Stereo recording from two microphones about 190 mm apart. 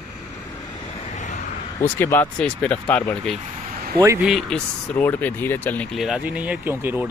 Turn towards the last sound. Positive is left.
turn(degrees=-10)  # may be behind; listen again after turning